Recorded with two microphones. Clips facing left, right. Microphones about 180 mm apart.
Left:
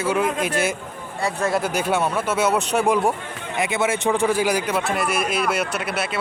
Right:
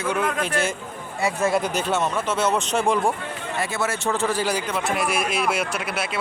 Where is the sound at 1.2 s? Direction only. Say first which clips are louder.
Even; centre (ahead or behind).